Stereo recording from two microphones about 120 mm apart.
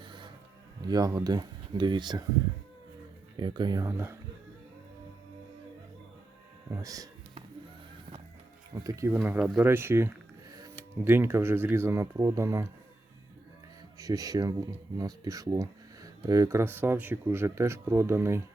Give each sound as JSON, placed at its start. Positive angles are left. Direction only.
{"t": 0.0, "sound": "music", "side_deg": -40}
{"t": 0.9, "sound": "speech", "side_deg": -30}
{"t": 3.3, "sound": "speech", "side_deg": -40}
{"t": 6.7, "sound": "speech", "side_deg": -30}
{"t": 8.7, "sound": "speech", "side_deg": -30}
{"t": 9.2, "sound": "speech", "side_deg": -15}
{"t": 14.0, "sound": "speech", "side_deg": -30}